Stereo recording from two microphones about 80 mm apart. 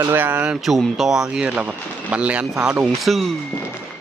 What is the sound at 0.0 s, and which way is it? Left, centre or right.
Speech, right.